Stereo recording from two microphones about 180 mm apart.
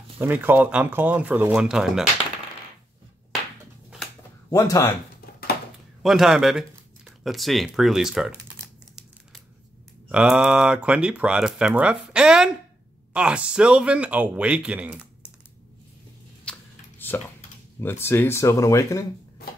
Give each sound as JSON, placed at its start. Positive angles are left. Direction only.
{"t": 0.2, "sound": "speech", "side_deg": -10}
{"t": 4.5, "sound": "speech", "side_deg": 20}
{"t": 6.0, "sound": "speech", "side_deg": 0}
{"t": 10.0, "sound": "speech", "side_deg": -5}
{"t": 16.5, "sound": "a sound", "side_deg": 5}
{"t": 17.0, "sound": "typing", "side_deg": 10}
{"t": 17.7, "sound": "speech", "side_deg": 10}